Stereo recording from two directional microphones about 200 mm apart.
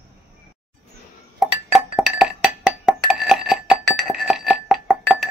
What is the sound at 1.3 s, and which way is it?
Chink, 5° right (ahead or behind).